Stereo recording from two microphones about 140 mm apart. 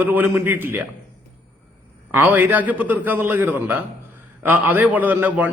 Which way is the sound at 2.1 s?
15° right (ahead or behind).